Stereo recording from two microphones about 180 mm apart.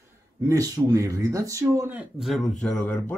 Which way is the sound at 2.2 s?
Centre (ahead or behind).